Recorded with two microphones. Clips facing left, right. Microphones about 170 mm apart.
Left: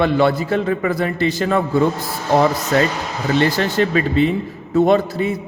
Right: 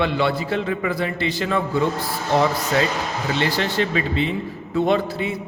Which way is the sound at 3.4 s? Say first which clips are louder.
Left 4 dB; 45° left (ahead or behind).